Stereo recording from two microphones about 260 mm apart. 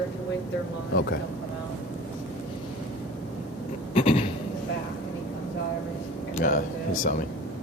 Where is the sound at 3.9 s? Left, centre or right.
Left.